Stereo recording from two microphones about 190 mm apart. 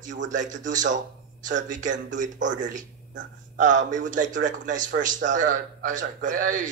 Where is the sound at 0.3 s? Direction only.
40° right (ahead or behind).